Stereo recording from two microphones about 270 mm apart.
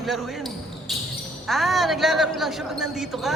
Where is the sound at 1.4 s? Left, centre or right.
Centre.